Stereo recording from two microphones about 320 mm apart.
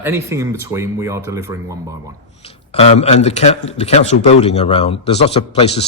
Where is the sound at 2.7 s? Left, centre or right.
Centre.